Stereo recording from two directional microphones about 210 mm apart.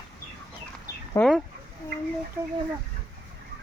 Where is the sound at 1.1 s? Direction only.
5° left (ahead or behind).